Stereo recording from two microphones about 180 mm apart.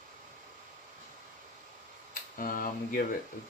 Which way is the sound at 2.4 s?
50° left (ahead or behind).